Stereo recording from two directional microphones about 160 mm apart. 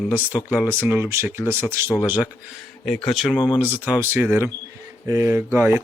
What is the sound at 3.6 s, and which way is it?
Speech, 10° right (ahead or behind).